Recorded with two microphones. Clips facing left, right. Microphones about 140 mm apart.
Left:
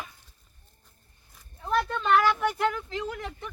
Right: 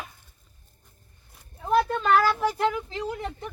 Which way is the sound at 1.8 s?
40° right (ahead or behind).